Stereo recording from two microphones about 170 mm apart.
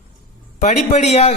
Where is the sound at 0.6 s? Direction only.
40° left (ahead or behind).